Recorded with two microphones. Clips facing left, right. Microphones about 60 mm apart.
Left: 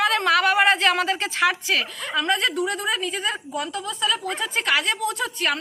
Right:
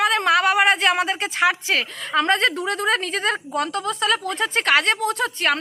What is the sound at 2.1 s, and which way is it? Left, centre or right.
Speech, right.